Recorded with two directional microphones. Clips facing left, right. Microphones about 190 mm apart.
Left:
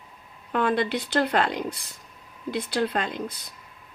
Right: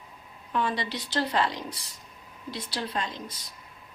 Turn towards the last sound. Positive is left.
turn(degrees=55)  # may be behind; listen again after turning